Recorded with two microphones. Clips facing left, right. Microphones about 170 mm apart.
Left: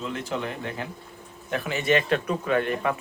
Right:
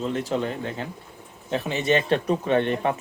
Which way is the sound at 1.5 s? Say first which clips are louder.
Right 1 dB; 25° right (ahead or behind).